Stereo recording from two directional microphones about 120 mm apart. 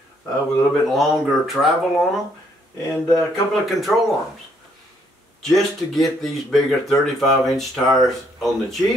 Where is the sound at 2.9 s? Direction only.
30° left (ahead or behind).